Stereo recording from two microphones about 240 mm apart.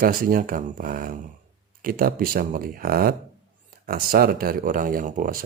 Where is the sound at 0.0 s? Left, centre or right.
Right.